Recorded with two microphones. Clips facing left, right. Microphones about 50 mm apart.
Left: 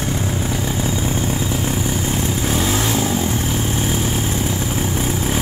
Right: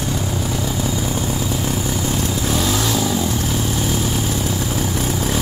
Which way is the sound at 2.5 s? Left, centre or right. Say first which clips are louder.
Even; left.